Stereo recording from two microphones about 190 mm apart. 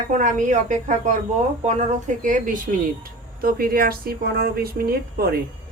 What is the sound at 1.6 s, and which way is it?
A woman's voice, 40° right (ahead or behind).